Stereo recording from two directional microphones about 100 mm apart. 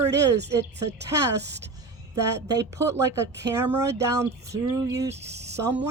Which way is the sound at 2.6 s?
30° right (ahead or behind).